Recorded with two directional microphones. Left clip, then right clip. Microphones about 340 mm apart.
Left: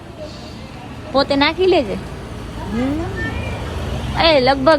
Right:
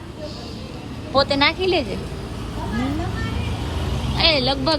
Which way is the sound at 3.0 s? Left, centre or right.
Centre.